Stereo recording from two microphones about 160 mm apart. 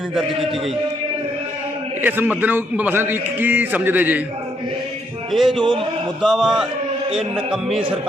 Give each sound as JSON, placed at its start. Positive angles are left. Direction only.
{"t": 2.0, "sound": "a man's voice", "side_deg": -10}
{"t": 5.3, "sound": "speech", "side_deg": 0}
{"t": 7.7, "sound": "music", "side_deg": -35}